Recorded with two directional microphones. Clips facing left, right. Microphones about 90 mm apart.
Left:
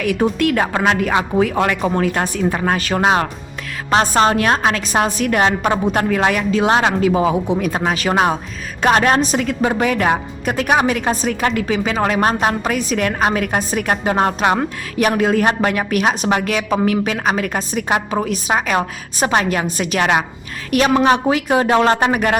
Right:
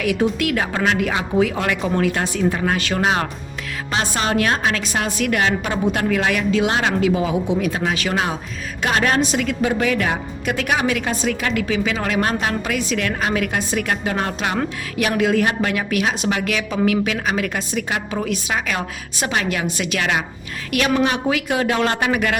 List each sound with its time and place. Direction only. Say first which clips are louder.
0.0 s a woman's voice: left 3 dB; 45° left (ahead or behind)